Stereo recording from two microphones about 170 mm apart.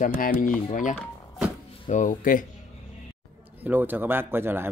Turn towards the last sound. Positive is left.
turn(degrees=-15)  # may be behind; listen again after turning